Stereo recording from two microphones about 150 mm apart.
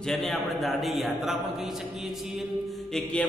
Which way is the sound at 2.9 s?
5° left (ahead or behind).